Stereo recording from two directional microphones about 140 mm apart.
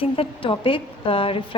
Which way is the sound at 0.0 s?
40° left (ahead or behind).